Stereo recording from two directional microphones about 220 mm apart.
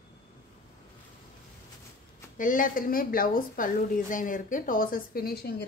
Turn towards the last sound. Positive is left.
turn(degrees=45)  # may be behind; listen again after turning